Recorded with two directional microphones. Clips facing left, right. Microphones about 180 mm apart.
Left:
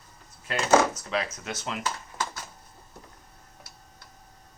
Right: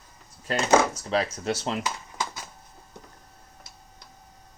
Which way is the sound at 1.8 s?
15° right (ahead or behind).